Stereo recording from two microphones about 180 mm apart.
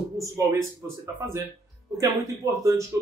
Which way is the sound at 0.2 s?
15° right (ahead or behind).